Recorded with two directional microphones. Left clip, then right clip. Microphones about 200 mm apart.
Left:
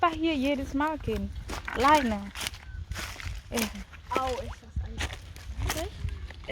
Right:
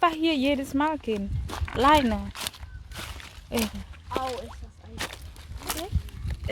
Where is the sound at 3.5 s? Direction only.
25° right (ahead or behind).